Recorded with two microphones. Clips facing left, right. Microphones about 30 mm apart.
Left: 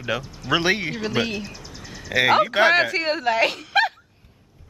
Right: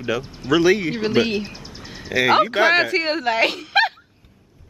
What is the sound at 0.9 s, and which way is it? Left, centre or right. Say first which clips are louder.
Speech: right 5 dB; right.